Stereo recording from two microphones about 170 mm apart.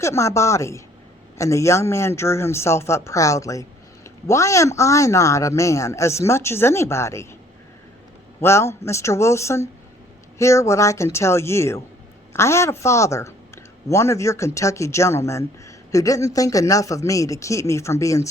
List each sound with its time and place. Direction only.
0.0 s a woman's voice: 15° left (ahead or behind)
8.4 s a woman's voice: 15° left (ahead or behind)